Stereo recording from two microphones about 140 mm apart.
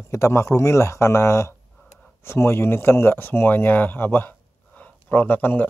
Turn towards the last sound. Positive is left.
turn(degrees=10)  # may be behind; listen again after turning